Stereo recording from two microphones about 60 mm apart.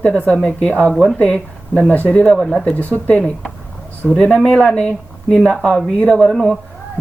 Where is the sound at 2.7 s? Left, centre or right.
Left.